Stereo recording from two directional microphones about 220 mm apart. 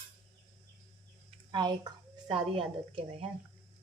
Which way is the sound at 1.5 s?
20° right (ahead or behind).